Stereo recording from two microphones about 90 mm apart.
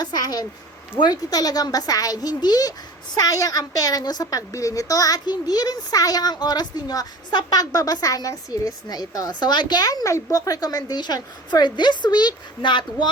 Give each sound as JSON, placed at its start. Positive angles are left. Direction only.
{"t": 0.0, "sound": "a woman's voice", "side_deg": 45}